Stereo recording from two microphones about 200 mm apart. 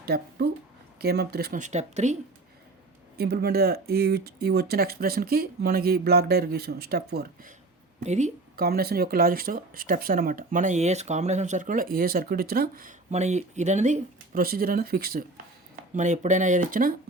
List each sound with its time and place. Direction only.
0.0 s speech: 50° right (ahead or behind)
1.6 s speech: 35° right (ahead or behind)
3.2 s speech: 50° right (ahead or behind)
8.0 s speech: 35° right (ahead or behind)
8.5 s speech: 50° right (ahead or behind)
15.7 s speech: 35° right (ahead or behind)